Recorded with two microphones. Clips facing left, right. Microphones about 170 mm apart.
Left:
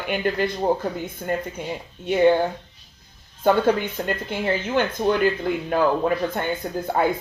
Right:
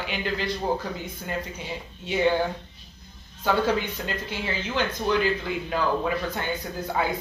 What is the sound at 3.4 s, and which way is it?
Speech, 50° left (ahead or behind).